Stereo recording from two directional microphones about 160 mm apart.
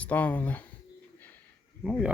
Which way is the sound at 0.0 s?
10° left (ahead or behind).